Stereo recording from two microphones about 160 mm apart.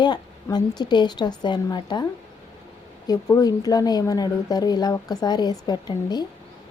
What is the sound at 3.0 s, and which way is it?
A woman's voice, 20° left (ahead or behind).